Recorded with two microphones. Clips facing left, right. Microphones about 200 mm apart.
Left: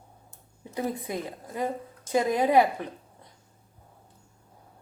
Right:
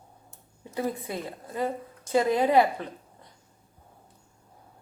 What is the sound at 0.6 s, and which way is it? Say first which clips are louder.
A woman's voice: even; 15° left (ahead or behind).